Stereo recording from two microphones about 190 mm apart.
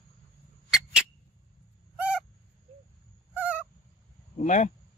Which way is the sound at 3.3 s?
10° right (ahead or behind).